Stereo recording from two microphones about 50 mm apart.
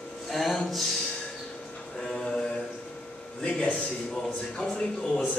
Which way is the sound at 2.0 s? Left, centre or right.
Centre.